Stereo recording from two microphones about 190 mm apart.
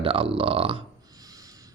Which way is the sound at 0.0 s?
30° right (ahead or behind).